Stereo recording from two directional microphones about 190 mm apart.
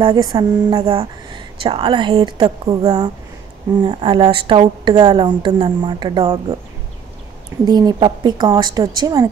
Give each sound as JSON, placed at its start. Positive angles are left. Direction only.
{"t": 0.0, "sound": "a woman's voice", "side_deg": -20}
{"t": 7.6, "sound": "a woman's voice", "side_deg": -20}